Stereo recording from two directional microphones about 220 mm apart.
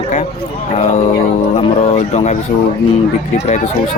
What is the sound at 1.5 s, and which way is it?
Speech, 30° left (ahead or behind).